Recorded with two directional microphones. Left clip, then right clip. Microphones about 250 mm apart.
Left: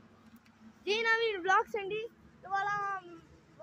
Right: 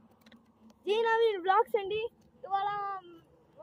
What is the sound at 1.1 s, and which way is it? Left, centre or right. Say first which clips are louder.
Speech: right 1 dB; centre.